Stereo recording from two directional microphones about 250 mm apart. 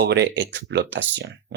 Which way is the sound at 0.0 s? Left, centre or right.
Right.